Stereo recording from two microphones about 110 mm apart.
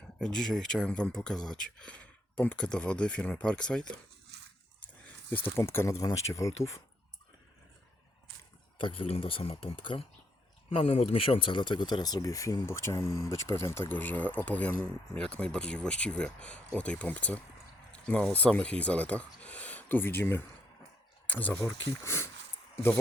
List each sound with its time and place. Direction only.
0.2 s speech: 5° left (ahead or behind)
5.3 s speech: 20° left (ahead or behind)
8.8 s speech: 50° left (ahead or behind); by 21.6 s 15° left (ahead or behind)
21.6 s speech: 25° left (ahead or behind)